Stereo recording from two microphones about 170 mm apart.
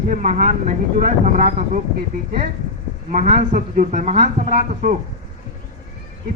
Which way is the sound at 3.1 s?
45° right (ahead or behind).